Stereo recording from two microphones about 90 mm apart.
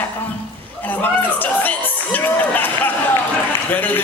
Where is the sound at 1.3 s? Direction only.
20° left (ahead or behind).